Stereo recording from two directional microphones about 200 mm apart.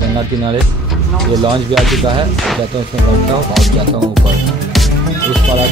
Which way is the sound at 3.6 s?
Centre (ahead or behind).